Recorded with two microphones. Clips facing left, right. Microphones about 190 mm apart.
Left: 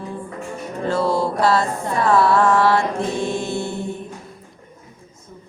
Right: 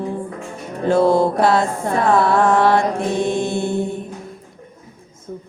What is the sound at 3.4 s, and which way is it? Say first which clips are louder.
Mantra: right 4 dB; 55° right (ahead or behind).